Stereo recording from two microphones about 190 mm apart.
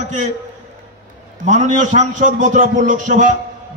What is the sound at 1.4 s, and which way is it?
A man's voice, 40° right (ahead or behind).